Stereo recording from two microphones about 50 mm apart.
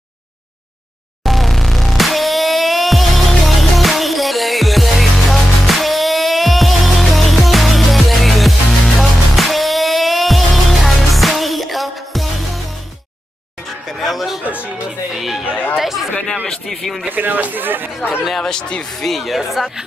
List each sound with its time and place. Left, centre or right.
1.2 s music: centre
13.8 s music: centre
15.1 s a sound: centre
15.5 s chatter: left
15.8 s chatter: centre
16.4 s a sound: centre
17.1 s a sound: right
18.4 s speech: centre
19.0 s speech: centre